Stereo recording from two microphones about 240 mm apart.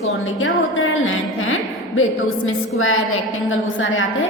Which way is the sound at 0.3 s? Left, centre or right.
Left.